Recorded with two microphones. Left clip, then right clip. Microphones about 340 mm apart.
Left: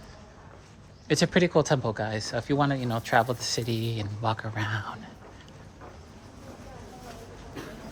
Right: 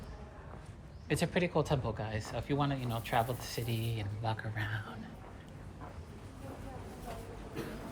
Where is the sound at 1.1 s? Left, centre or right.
Centre.